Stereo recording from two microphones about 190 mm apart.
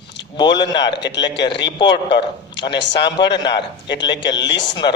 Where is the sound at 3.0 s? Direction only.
65° left (ahead or behind).